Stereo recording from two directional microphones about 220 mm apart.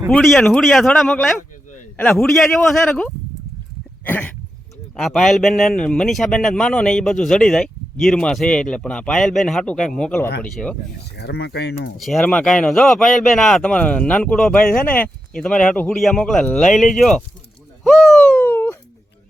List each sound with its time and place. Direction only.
0.1 s a man's voice: centre (ahead or behind)
4.0 s a sound: 10° left (ahead or behind)
4.9 s a man's voice: centre (ahead or behind)
11.2 s speech: 50° left (ahead or behind)
11.9 s a man's voice: centre (ahead or behind)
17.8 s a sound: centre (ahead or behind)